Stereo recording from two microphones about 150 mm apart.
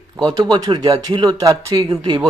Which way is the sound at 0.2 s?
30° right (ahead or behind).